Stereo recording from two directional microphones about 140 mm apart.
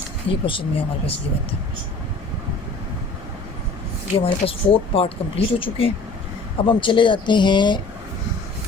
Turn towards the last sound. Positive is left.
turn(degrees=35)  # may be behind; listen again after turning